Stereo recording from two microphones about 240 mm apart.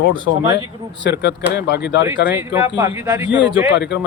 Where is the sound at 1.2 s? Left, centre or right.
Left.